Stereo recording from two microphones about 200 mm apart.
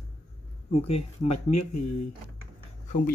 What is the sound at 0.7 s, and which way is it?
Speech, 30° left (ahead or behind).